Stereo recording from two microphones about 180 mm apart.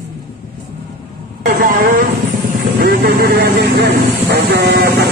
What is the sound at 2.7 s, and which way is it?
Speech, 60° right (ahead or behind).